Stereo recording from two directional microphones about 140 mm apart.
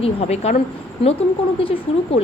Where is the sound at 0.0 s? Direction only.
50° left (ahead or behind).